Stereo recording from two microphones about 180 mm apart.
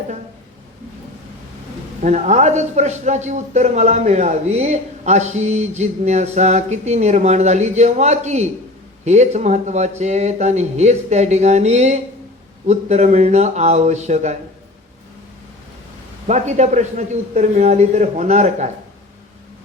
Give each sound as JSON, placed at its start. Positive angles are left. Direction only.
{"t": 2.0, "sound": "a man's voice", "side_deg": -40}
{"t": 16.2, "sound": "a man's voice", "side_deg": -40}